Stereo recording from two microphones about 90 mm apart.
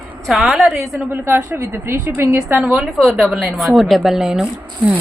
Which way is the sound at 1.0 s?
20° right (ahead or behind).